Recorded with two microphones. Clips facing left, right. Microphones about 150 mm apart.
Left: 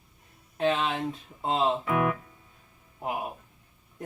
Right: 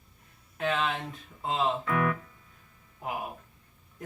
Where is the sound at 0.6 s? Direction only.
25° left (ahead or behind).